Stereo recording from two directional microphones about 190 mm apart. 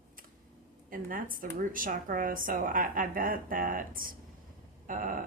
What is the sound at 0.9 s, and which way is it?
A woman's voice, 45° right (ahead or behind).